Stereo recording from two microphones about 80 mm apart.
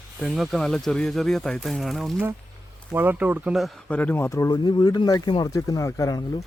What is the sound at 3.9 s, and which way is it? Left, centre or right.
Speech, centre.